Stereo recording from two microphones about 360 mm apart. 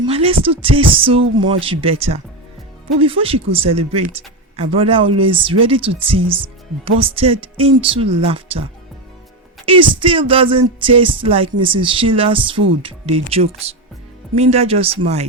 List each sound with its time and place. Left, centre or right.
0.0 s music: centre
9.6 s music: centre